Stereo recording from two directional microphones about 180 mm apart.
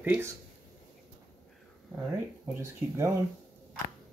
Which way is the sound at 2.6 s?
15° right (ahead or behind).